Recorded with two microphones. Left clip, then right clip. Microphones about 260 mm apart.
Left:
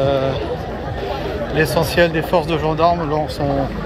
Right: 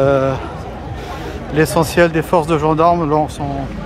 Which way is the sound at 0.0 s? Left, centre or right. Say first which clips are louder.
Right 4 dB; right.